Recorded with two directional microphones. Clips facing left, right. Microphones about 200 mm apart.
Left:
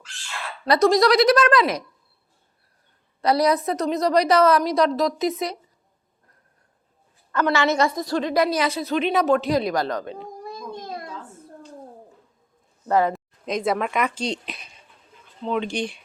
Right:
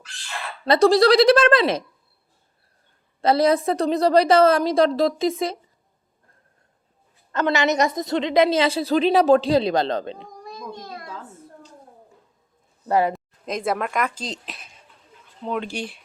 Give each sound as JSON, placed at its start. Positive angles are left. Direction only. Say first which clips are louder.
{"t": 0.6, "sound": "a woman's voice", "louder": "right 2 dB", "side_deg": -30}
{"t": 3.2, "sound": "a woman's voice", "louder": "right 2 dB", "side_deg": -25}
{"t": 7.3, "sound": "a woman's voice", "louder": "even", "side_deg": -20}
{"t": 12.9, "sound": "speech", "louder": "even", "side_deg": -15}
{"t": 13.1, "sound": "speech", "louder": "left 2 dB", "side_deg": 0}